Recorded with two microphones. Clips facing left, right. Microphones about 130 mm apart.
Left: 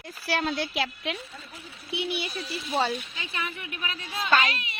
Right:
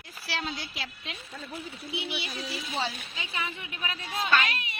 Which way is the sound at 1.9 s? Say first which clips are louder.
Left 5 dB; 50° left (ahead or behind).